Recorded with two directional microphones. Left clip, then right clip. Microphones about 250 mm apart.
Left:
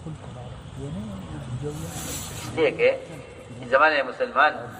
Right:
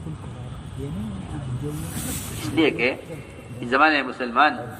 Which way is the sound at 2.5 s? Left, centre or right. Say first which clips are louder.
Left 1 dB; right.